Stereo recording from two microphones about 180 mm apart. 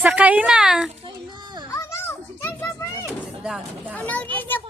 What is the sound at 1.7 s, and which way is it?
Children playing, 15° left (ahead or behind).